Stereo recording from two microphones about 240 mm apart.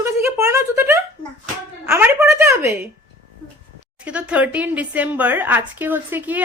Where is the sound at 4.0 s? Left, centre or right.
Centre.